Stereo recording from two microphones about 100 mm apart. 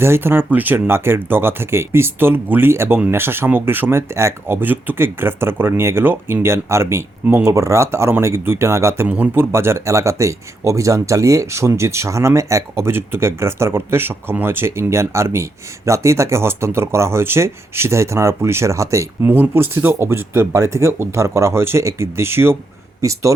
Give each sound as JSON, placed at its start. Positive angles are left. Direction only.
{"t": 0.0, "sound": "speech", "side_deg": -25}
{"t": 9.0, "sound": "speech", "side_deg": -15}